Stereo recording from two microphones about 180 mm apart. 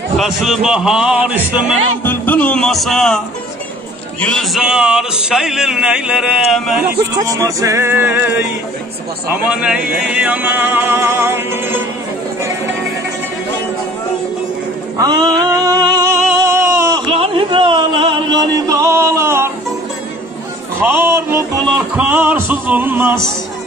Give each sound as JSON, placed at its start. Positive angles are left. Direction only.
{"t": 0.2, "sound": "speech", "side_deg": 0}
{"t": 2.0, "sound": "speech", "side_deg": 10}
{"t": 4.2, "sound": "speech", "side_deg": 5}
{"t": 7.2, "sound": "chant", "side_deg": -20}
{"t": 9.3, "sound": "chant", "side_deg": -10}
{"t": 15.0, "sound": "a sound", "side_deg": -20}
{"t": 17.1, "sound": "a sound", "side_deg": -30}
{"t": 20.8, "sound": "music", "side_deg": -10}